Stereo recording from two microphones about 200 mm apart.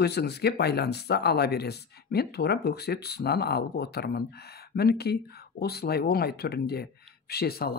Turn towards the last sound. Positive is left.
turn(degrees=50)  # may be behind; listen again after turning